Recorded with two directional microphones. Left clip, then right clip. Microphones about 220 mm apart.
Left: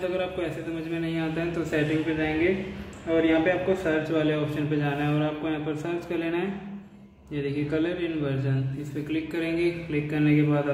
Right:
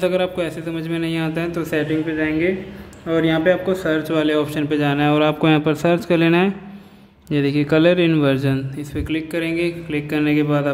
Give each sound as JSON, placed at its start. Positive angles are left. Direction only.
{"t": 0.0, "sound": "a man's voice", "side_deg": -45}
{"t": 9.1, "sound": "a woman's voice", "side_deg": -40}